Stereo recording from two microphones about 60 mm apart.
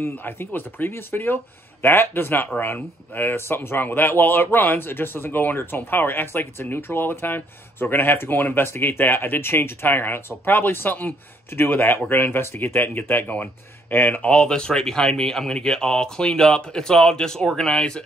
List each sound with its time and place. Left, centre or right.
0.2 s speech: left
14.3 s speech: centre